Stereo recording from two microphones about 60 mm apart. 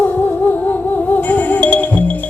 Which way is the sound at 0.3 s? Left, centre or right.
Left.